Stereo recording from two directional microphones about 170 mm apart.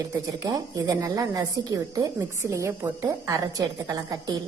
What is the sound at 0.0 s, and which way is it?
A woman's voice, 20° right (ahead or behind).